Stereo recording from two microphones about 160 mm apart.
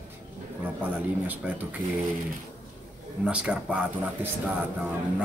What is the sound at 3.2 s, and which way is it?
A man's voice, 5° right (ahead or behind).